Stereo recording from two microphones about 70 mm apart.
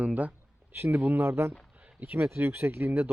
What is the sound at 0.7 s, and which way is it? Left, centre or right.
Speech, right.